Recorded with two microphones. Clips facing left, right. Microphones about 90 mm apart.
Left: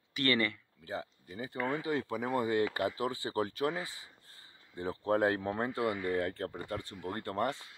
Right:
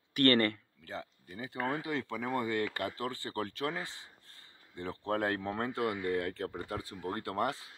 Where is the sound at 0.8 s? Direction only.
10° left (ahead or behind).